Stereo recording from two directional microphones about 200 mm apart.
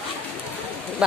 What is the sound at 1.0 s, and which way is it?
Speech, 5° right (ahead or behind).